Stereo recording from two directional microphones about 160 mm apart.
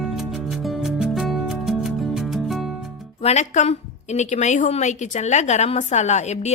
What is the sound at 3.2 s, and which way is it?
A woman's voice, 45° left (ahead or behind).